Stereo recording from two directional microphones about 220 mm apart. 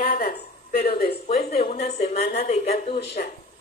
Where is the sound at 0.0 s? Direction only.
45° left (ahead or behind).